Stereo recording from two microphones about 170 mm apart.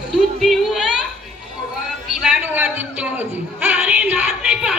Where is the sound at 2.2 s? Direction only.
10° right (ahead or behind).